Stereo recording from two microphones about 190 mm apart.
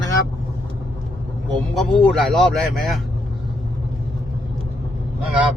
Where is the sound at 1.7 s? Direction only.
Centre (ahead or behind).